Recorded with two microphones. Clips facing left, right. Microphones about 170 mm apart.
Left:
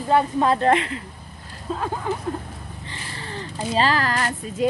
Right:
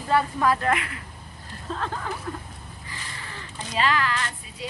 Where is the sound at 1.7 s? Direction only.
10° left (ahead or behind).